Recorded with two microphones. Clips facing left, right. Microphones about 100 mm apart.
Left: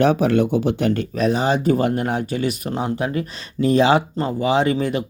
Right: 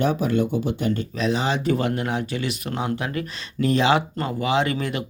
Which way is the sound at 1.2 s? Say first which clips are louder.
Left 5 dB; 45° left (ahead or behind).